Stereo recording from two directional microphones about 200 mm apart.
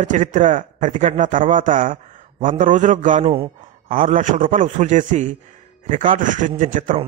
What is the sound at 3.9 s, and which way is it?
A man's voice, 40° right (ahead or behind).